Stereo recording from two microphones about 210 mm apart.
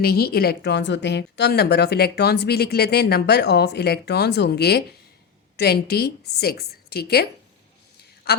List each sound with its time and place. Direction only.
0.0 s a woman's voice: 50° left (ahead or behind)